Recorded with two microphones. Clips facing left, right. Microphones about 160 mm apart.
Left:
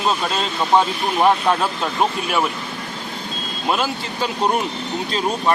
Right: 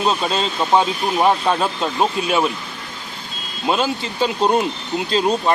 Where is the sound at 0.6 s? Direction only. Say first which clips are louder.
Even; 5° right (ahead or behind).